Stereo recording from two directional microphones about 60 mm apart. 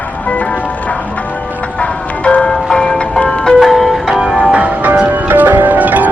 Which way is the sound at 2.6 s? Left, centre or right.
Centre.